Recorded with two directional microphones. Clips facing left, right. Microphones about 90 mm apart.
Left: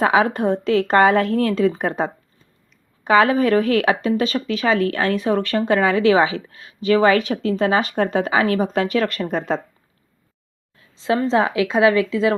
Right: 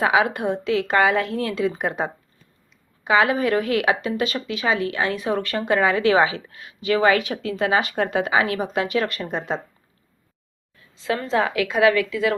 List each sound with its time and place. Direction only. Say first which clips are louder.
0.0 s a woman's voice: left 3 dB; 40° left (ahead or behind)
10.9 s a woman's voice: left 4 dB; 25° left (ahead or behind)